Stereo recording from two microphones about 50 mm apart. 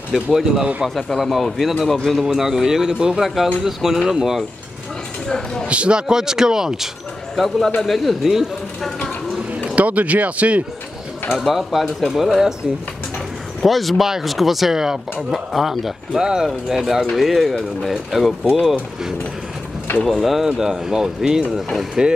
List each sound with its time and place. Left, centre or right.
0.1 s speech: centre
5.3 s speech: centre
5.7 s speech: right
7.3 s speech: centre
9.8 s speech: right
11.2 s speech: centre
13.6 s speech: centre